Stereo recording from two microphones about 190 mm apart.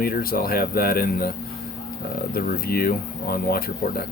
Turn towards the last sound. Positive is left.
turn(degrees=50)  # may be behind; listen again after turning